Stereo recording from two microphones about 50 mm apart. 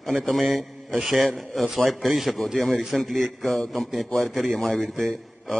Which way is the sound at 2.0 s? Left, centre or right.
Centre.